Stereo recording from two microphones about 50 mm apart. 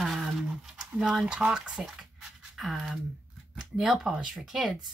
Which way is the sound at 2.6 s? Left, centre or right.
Centre.